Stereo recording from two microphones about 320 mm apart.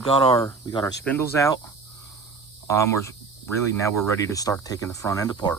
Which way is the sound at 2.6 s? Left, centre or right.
Centre.